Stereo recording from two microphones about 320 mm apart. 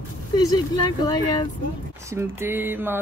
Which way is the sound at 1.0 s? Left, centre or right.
Centre.